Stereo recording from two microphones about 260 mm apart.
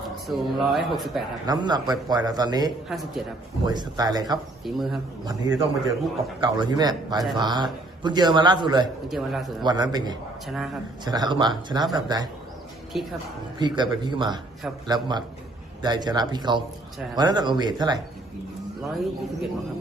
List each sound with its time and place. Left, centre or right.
0.3 s speech: centre
1.5 s a man's voice: centre
2.9 s speech: centre
3.7 s a man's voice: centre
4.6 s speech: centre
5.2 s a man's voice: centre
9.0 s speech: centre
9.6 s a man's voice: centre
10.4 s speech: centre
11.0 s a man's voice: centre
12.9 s speech: centre
13.6 s a man's voice: centre
18.8 s speech: centre